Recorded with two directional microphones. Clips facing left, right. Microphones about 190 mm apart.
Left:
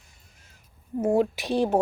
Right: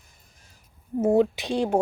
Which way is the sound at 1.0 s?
20° right (ahead or behind).